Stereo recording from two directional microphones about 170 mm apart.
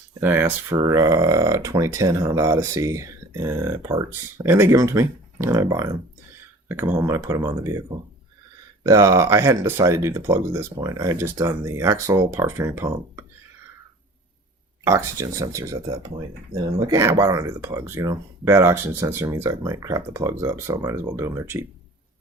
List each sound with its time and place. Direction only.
0.2 s speech: 10° right (ahead or behind)
6.9 s speech: 15° right (ahead or behind)
14.8 s speech: 15° right (ahead or behind)